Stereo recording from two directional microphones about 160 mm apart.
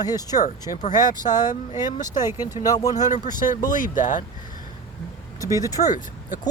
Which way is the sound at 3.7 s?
55° left (ahead or behind).